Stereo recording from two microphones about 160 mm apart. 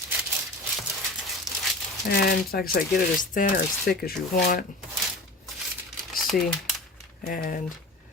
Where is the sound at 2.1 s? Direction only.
70° left (ahead or behind).